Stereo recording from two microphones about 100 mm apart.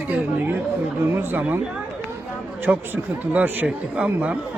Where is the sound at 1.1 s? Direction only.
20° right (ahead or behind).